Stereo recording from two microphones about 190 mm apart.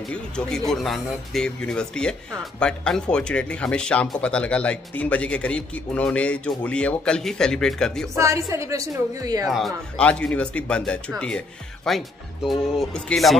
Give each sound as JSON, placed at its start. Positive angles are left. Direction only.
{"t": 0.1, "sound": "a man's voice", "side_deg": 5}
{"t": 8.2, "sound": "a woman's voice", "side_deg": -15}
{"t": 9.5, "sound": "a man's voice", "side_deg": 0}